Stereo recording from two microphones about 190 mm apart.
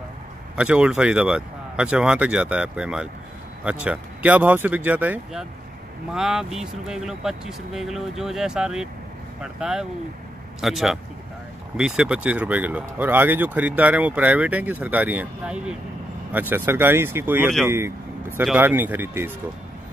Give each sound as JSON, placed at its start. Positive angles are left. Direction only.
{"t": 0.6, "sound": "speech", "side_deg": -5}